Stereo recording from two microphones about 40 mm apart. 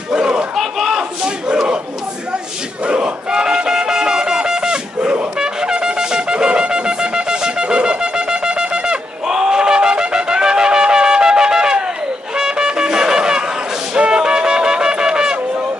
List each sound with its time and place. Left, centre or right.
0.1 s battle cry: right
0.6 s battle cry: centre
1.2 s battle cry: right
2.9 s music: right
5.4 s wind instrument: centre
12.4 s music: centre